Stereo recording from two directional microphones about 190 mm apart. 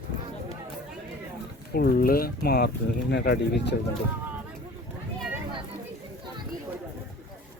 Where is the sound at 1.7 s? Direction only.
50° left (ahead or behind).